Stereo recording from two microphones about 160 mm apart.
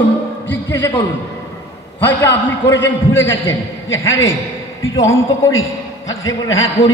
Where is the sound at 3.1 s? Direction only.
15° left (ahead or behind).